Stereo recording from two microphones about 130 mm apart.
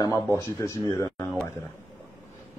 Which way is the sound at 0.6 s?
25° left (ahead or behind).